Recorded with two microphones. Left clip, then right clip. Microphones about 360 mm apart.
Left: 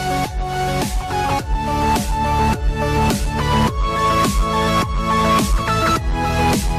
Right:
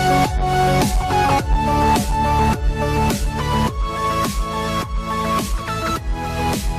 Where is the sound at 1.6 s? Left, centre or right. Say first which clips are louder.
Right 1 dB; right.